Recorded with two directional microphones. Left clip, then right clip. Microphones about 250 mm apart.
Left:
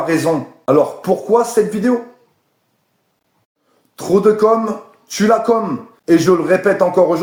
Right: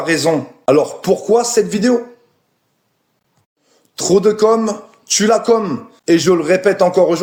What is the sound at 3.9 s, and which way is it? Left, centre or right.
Speech, right.